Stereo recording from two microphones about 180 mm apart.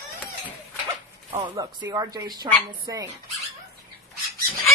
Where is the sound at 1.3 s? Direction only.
30° right (ahead or behind).